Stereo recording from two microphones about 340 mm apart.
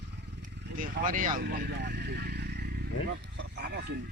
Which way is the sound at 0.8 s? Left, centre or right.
Right.